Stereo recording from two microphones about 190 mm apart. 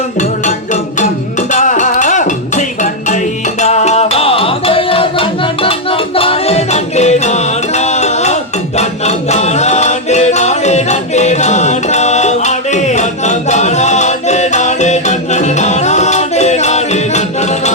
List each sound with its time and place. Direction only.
0.2 s music: 40° left (ahead or behind)